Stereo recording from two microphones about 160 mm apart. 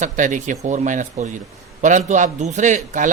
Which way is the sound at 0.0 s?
50° right (ahead or behind).